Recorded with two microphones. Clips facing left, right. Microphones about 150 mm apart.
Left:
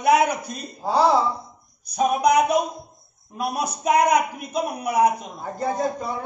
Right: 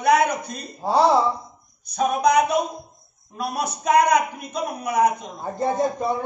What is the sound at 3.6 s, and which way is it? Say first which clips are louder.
Speech: right 1 dB; 10° left (ahead or behind).